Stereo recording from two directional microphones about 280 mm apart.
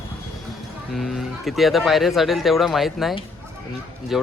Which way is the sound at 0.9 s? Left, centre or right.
Centre.